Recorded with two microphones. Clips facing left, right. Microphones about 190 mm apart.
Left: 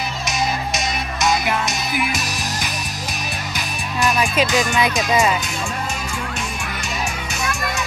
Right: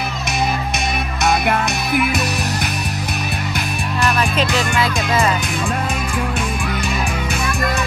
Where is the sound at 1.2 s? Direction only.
60° right (ahead or behind).